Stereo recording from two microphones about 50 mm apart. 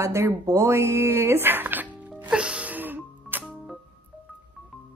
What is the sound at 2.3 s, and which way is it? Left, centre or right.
Music, right.